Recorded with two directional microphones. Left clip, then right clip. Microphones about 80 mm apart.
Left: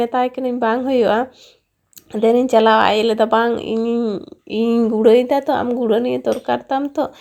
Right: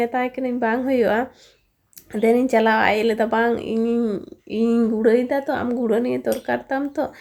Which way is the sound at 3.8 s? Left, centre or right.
Left.